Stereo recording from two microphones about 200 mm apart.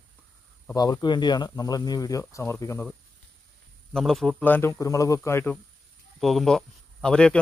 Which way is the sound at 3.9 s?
Centre (ahead or behind).